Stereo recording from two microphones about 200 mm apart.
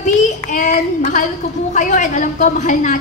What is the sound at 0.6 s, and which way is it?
A woman's voice, 40° left (ahead or behind).